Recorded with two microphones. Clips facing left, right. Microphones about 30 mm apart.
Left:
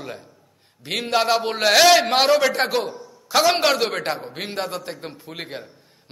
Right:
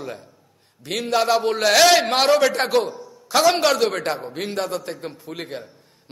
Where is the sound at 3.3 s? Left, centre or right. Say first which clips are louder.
Right 1 dB; centre.